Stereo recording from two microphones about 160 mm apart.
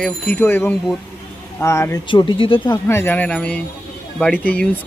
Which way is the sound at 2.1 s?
30° left (ahead or behind).